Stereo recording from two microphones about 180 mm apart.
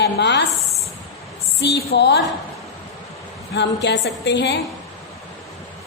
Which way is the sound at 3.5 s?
70° left (ahead or behind).